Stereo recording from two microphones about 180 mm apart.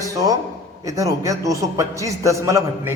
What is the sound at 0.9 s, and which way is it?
A man's voice, 20° right (ahead or behind).